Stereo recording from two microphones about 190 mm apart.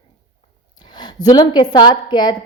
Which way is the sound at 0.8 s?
25° left (ahead or behind).